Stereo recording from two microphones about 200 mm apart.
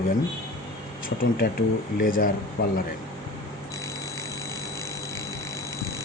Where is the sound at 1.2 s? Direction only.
50° left (ahead or behind).